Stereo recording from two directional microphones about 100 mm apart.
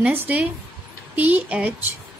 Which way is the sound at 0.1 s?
15° right (ahead or behind).